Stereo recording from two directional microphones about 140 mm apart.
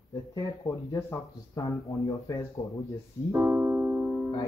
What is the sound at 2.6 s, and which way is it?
Speech, 20° left (ahead or behind).